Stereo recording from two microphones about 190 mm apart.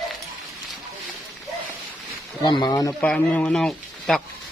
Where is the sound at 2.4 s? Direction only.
25° left (ahead or behind).